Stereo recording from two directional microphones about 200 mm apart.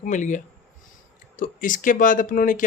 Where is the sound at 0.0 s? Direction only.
40° left (ahead or behind).